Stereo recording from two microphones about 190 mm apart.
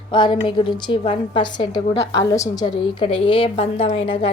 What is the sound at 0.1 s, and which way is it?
A woman's voice, 25° left (ahead or behind).